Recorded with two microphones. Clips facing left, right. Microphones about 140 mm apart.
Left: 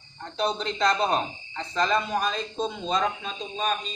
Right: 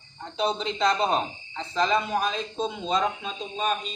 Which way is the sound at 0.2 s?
5° right (ahead or behind).